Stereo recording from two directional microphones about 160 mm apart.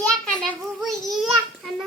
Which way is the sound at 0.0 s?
5° left (ahead or behind).